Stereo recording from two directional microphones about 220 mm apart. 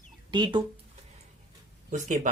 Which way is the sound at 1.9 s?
35° right (ahead or behind).